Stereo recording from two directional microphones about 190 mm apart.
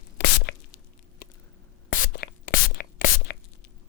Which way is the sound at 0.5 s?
60° left (ahead or behind).